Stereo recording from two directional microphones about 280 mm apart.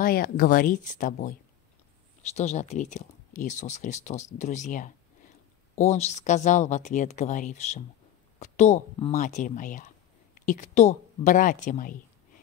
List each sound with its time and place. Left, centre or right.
0.0 s speech: left
2.3 s a woman's voice: left